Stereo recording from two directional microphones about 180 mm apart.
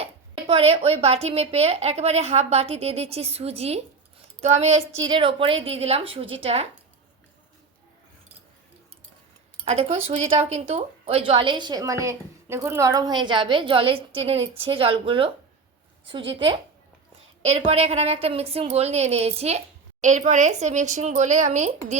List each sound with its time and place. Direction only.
0.0 s a woman's voice: 35° right (ahead or behind)
4.9 s a woman's voice: 20° right (ahead or behind)
9.6 s speech: 35° right (ahead or behind)
17.6 s a woman's voice: 35° right (ahead or behind)